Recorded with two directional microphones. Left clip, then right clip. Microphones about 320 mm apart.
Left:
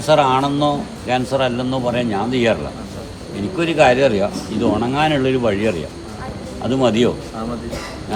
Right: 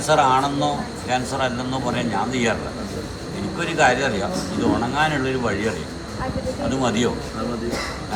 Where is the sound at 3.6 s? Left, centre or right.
Left.